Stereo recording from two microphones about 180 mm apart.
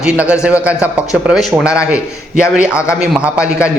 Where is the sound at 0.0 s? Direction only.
5° right (ahead or behind).